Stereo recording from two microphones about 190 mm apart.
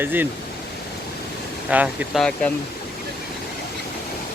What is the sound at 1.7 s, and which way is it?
Speech, 5° right (ahead or behind).